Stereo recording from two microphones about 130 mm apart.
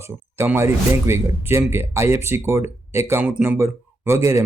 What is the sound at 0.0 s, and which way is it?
Speech, 20° right (ahead or behind).